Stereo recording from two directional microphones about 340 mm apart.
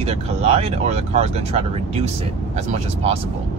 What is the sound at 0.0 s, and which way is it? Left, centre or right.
Speech, centre.